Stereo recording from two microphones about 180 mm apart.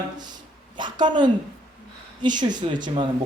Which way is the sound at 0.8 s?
25° right (ahead or behind).